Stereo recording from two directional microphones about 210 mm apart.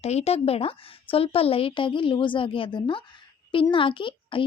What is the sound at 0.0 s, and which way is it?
A woman's voice, 30° left (ahead or behind).